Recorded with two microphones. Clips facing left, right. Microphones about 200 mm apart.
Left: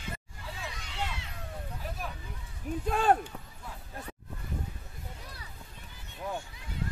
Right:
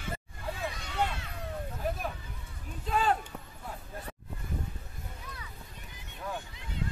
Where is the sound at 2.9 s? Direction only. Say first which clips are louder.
Left 3 dB; 50° left (ahead or behind).